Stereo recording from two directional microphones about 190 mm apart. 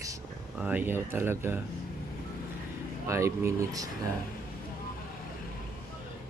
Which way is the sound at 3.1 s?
15° right (ahead or behind).